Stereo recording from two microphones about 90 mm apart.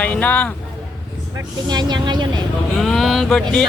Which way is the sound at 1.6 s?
55° right (ahead or behind).